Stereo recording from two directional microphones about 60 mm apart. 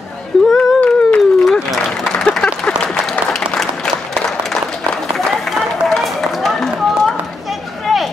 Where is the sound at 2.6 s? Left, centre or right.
Centre.